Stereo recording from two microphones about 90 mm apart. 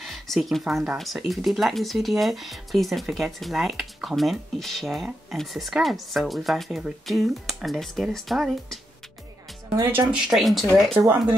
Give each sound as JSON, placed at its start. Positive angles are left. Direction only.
{"t": 0.0, "sound": "speech", "side_deg": 0}
{"t": 9.8, "sound": "speech", "side_deg": -25}
{"t": 10.1, "sound": "speech", "side_deg": -5}